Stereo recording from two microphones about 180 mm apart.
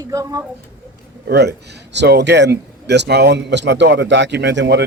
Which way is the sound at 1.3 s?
65° right (ahead or behind).